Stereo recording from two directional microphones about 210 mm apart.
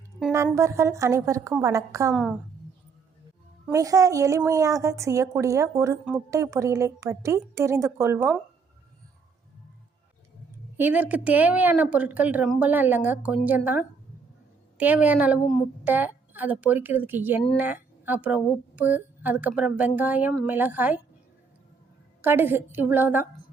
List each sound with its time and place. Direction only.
0.2 s a sound: 10° right (ahead or behind)
0.5 s speech: 15° right (ahead or behind)
3.7 s speech: 15° right (ahead or behind)
10.8 s speech: 10° right (ahead or behind)
22.2 s speech: 10° right (ahead or behind)